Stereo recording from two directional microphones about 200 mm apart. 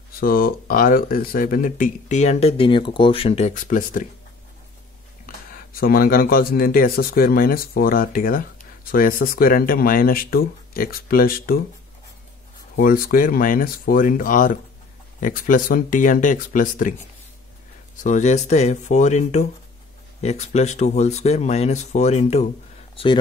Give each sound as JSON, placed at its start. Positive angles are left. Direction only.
{"t": 0.2, "sound": "speech", "side_deg": 45}
{"t": 5.2, "sound": "speech", "side_deg": 45}
{"t": 12.7, "sound": "speech", "side_deg": 45}
{"t": 18.0, "sound": "speech", "side_deg": 35}